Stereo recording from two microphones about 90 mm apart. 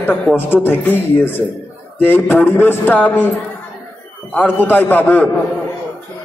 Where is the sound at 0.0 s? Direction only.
15° left (ahead or behind).